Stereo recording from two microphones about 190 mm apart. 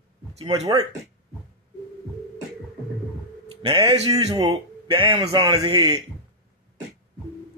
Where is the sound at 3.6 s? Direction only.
30° right (ahead or behind).